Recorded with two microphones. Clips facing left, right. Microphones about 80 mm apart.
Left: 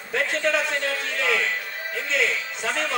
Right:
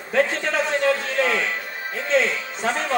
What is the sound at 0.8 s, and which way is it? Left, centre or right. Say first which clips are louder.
A man's voice: right 6 dB; right.